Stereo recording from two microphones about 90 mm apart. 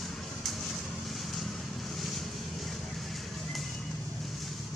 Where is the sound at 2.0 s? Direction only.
Centre (ahead or behind).